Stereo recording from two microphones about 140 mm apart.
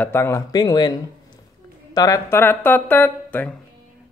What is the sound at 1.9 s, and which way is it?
A woman's voice, 25° left (ahead or behind).